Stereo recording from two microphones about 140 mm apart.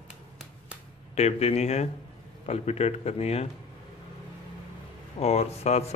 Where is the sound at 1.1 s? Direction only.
50° left (ahead or behind).